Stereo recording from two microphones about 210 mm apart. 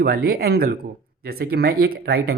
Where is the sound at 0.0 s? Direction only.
45° right (ahead or behind).